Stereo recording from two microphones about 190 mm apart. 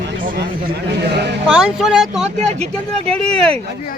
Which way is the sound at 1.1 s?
60° right (ahead or behind).